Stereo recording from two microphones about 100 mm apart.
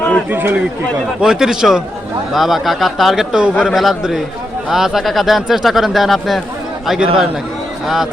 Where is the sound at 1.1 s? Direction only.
5° right (ahead or behind).